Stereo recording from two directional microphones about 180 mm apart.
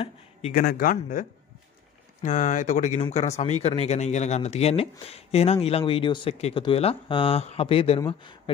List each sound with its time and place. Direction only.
0.5 s a man's voice: 50° left (ahead or behind)
2.2 s speech: 45° left (ahead or behind); by 8.4 s 25° left (ahead or behind)